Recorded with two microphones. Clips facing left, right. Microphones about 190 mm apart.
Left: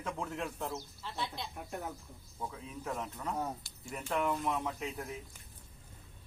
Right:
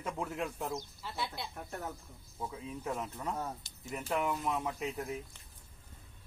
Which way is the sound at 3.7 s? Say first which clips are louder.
Left 1 dB; 20° right (ahead or behind).